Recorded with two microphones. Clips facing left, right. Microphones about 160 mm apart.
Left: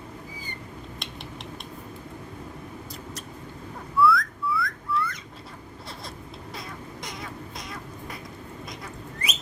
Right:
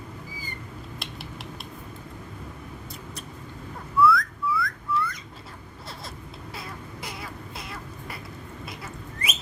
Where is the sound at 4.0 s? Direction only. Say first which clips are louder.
Right 1 dB; centre (ahead or behind).